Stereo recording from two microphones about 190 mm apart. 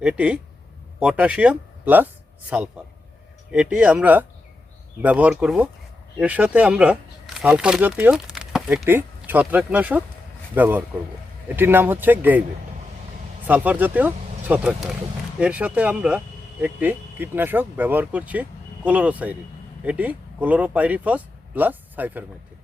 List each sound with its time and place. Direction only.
0.0 s speech: 5° right (ahead or behind)
13.5 s speech: 10° right (ahead or behind)